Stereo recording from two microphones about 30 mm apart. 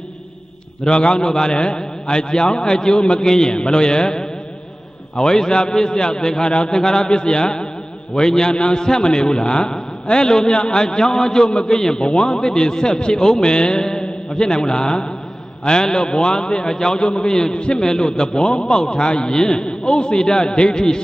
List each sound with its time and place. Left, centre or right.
0.8 s a man's voice: left
3.3 s a man's voice: centre
3.5 s a man's voice: left
6.8 s a man's voice: left
12.1 s a man's voice: left
17.0 s a man's voice: left